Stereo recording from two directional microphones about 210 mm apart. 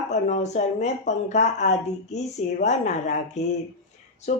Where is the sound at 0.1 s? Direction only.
35° left (ahead or behind).